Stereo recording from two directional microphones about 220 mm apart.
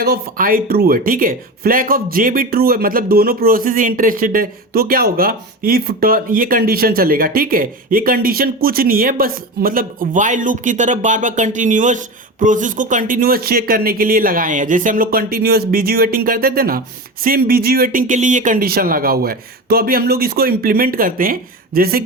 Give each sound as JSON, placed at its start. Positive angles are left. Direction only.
{"t": 0.0, "sound": "speech", "side_deg": -40}